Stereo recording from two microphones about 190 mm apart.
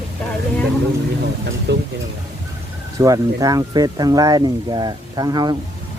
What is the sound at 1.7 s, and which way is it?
Speech, 65° right (ahead or behind).